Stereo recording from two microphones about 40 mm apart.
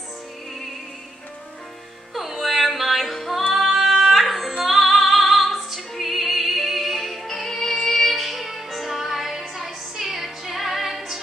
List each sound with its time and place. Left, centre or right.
2.1 s music: centre